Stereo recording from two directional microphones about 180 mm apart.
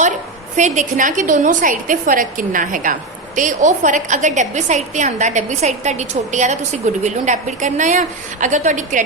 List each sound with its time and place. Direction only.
0.5 s a woman's voice: 45° right (ahead or behind)